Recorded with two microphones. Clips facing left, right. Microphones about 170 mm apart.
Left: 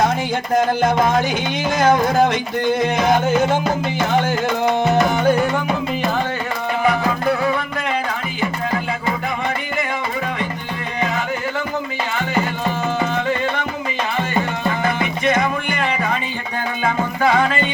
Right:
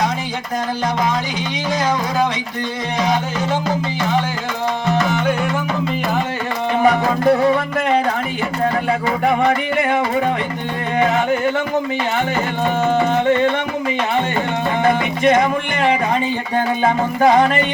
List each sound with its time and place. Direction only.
0.5 s music: 50° left (ahead or behind)
6.8 s music: 40° right (ahead or behind)
14.8 s music: 45° right (ahead or behind)
16.8 s music: 40° right (ahead or behind)